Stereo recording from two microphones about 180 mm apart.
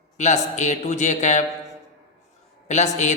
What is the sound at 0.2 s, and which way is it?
A man's voice, 40° left (ahead or behind).